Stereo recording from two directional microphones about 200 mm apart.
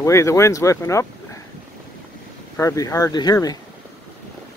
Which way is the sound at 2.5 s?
15° left (ahead or behind).